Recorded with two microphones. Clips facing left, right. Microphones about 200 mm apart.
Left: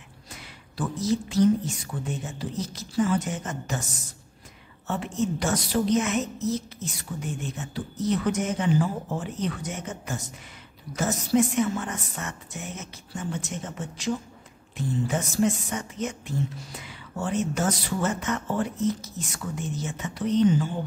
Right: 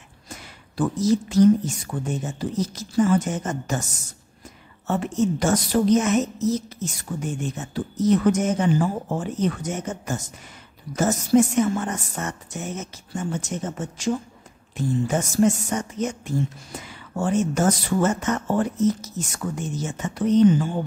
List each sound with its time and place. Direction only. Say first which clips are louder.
0.3 s a sound: right 5 dB; 45° right (ahead or behind)
2.0 s a woman's voice: right 6 dB; 45° right (ahead or behind)
4.8 s a woman's voice: right 5 dB; 45° right (ahead or behind)